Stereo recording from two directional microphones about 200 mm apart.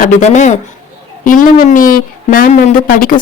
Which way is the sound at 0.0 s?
35° left (ahead or behind).